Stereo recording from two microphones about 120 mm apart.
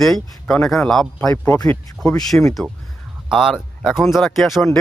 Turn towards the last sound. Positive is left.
turn(degrees=0)  # may be behind; listen again after turning